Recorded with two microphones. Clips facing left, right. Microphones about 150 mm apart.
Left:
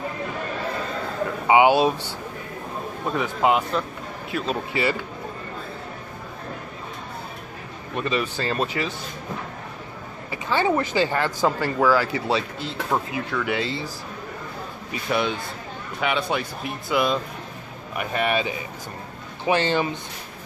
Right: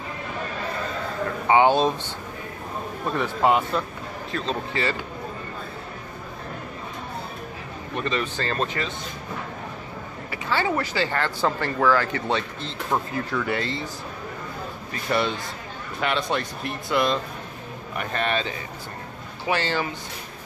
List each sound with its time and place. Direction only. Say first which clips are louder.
1.5 s speech: left 2 dB; 10° left (ahead or behind)
8.0 s speech: left 2 dB; 10° left (ahead or behind)
10.3 s speech: left 3 dB; 20° left (ahead or behind)
15.0 s speech: even; centre (ahead or behind); by 20.0 s 20° left (ahead or behind)